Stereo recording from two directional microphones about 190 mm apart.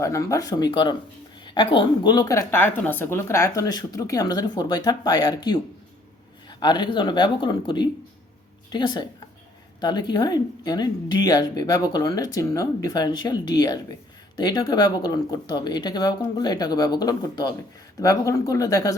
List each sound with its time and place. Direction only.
0.0 s speech: 15° left (ahead or behind)